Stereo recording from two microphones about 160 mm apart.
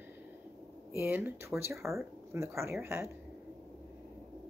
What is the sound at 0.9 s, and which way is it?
Speech, 15° right (ahead or behind).